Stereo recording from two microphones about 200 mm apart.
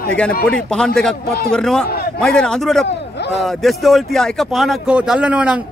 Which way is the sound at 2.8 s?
55° left (ahead or behind).